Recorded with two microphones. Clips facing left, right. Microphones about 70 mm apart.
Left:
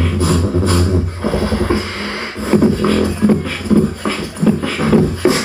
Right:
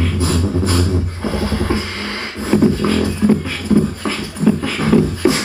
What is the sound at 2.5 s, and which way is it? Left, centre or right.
Beatboxing, centre.